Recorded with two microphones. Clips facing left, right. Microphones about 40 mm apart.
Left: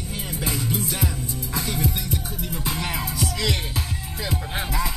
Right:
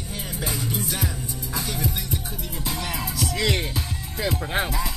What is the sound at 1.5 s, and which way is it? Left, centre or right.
Music, left.